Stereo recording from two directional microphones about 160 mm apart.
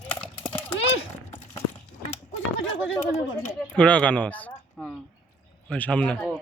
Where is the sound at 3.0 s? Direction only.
15° left (ahead or behind).